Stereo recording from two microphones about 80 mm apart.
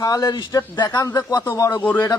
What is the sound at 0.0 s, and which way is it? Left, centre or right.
Speech, left.